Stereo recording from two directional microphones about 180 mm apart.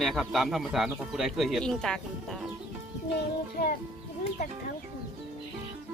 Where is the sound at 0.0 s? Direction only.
Centre (ahead or behind).